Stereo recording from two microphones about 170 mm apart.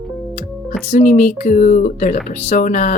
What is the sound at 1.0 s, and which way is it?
Speech, 45° left (ahead or behind).